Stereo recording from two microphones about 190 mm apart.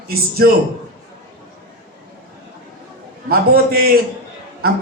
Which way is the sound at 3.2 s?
50° right (ahead or behind).